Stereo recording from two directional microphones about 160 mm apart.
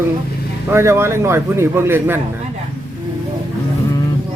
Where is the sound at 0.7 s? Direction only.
15° right (ahead or behind).